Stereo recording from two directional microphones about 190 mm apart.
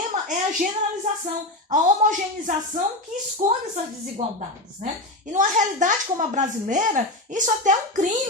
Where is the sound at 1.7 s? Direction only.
40° right (ahead or behind).